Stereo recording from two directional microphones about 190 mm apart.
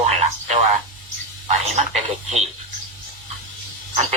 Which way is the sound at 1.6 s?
35° right (ahead or behind).